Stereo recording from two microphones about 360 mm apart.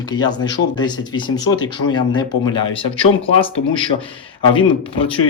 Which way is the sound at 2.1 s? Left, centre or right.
Centre.